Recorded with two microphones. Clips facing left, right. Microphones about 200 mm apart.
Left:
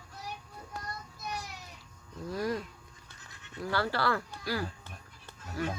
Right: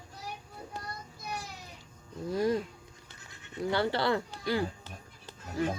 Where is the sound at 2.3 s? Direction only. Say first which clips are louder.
Right 5 dB; 25° right (ahead or behind).